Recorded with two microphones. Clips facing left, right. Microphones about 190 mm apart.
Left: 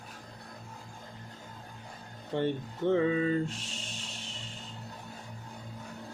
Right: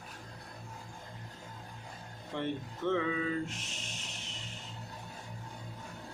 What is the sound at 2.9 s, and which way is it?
Music, 35° left (ahead or behind).